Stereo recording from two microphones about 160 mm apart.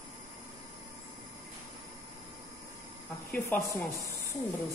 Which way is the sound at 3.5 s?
10° left (ahead or behind).